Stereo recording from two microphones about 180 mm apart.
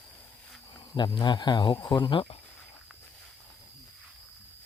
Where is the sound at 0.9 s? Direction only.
25° left (ahead or behind).